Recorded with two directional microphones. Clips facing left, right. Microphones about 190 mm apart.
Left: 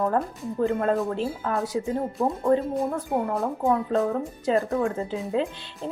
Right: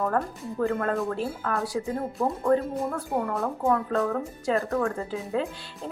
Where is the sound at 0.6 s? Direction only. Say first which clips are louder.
Left 3 dB; 20° left (ahead or behind).